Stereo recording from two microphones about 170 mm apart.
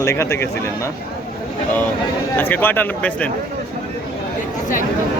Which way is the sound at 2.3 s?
10° left (ahead or behind).